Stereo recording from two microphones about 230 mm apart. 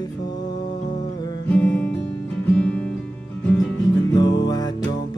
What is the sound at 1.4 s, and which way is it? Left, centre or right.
Music, centre.